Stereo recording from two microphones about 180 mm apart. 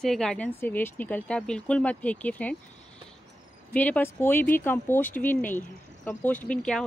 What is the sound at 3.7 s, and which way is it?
Speech, 10° left (ahead or behind).